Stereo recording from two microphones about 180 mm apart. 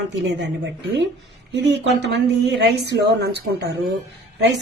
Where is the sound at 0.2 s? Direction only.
75° right (ahead or behind).